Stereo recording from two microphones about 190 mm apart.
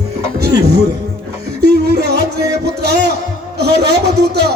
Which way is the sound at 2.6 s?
60° right (ahead or behind).